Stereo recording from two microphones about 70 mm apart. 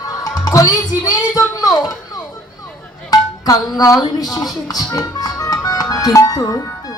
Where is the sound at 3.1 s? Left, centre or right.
Left.